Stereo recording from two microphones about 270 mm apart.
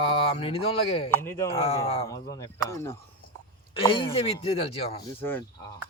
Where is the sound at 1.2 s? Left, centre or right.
Centre.